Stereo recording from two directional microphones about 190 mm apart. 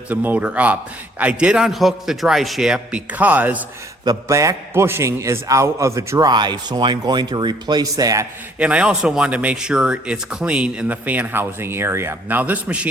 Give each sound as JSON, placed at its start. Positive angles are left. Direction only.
{"t": 0.1, "sound": "a man's voice", "side_deg": -10}
{"t": 8.5, "sound": "speech", "side_deg": -5}